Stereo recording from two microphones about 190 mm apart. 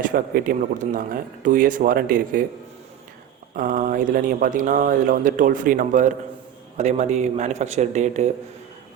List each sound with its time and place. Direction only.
0.0 s speech: 50° right (ahead or behind)
3.5 s speech: 45° right (ahead or behind)